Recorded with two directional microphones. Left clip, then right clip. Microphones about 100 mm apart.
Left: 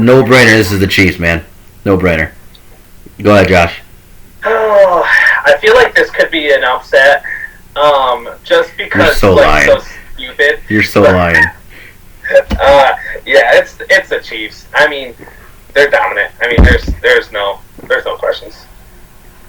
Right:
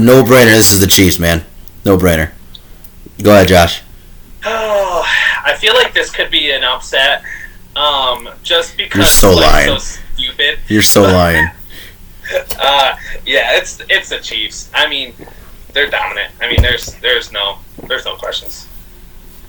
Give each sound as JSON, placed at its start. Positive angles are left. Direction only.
{"t": 0.3, "sound": "speech", "side_deg": -30}
{"t": 4.4, "sound": "speech", "side_deg": -20}
{"t": 10.8, "sound": "speech", "side_deg": -35}
{"t": 11.2, "sound": "a sound", "side_deg": -35}
{"t": 12.5, "sound": "speech", "side_deg": -15}